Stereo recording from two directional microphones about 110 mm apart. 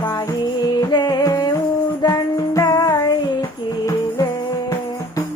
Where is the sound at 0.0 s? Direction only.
40° left (ahead or behind).